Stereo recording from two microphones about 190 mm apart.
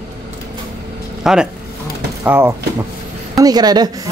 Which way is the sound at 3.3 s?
20° right (ahead or behind).